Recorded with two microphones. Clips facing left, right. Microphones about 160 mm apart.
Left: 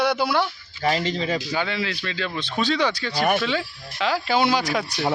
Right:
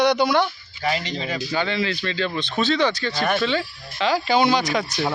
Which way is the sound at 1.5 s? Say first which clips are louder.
Right 2 dB; 5° left (ahead or behind).